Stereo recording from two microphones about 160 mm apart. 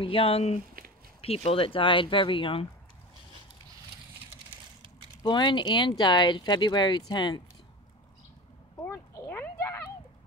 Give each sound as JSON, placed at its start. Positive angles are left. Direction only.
{"t": 0.0, "sound": "speech", "side_deg": 35}
{"t": 5.2, "sound": "speech", "side_deg": 30}
{"t": 8.8, "sound": "a sound", "side_deg": 15}